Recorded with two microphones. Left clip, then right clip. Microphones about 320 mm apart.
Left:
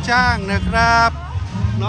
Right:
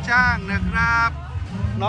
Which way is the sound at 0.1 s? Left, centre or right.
Centre.